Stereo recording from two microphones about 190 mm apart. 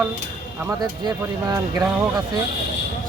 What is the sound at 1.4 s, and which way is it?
Speech, 15° right (ahead or behind).